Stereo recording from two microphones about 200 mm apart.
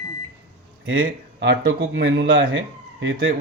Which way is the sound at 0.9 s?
70° right (ahead or behind).